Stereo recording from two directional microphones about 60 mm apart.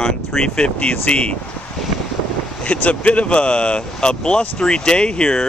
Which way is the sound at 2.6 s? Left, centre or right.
Left.